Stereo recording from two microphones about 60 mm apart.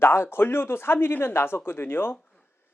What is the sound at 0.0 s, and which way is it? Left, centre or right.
A man's voice, left.